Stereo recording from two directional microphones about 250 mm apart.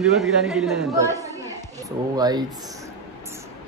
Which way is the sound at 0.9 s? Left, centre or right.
Centre.